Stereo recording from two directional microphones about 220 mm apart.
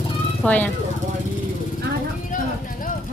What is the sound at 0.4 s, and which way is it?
Speech, 5° left (ahead or behind).